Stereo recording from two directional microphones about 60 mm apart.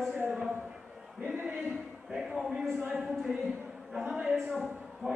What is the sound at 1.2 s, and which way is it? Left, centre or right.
Speech, right.